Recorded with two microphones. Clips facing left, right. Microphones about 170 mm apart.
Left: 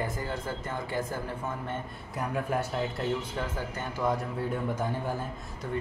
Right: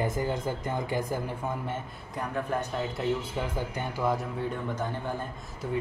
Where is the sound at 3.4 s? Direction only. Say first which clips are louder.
Right 2 dB; 10° right (ahead or behind).